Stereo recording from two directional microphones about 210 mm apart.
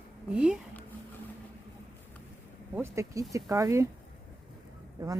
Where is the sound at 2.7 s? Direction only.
10° right (ahead or behind).